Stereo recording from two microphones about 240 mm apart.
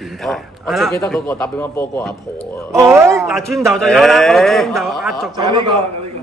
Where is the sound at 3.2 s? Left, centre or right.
Centre.